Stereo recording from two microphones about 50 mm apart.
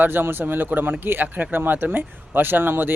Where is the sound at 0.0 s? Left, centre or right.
Right.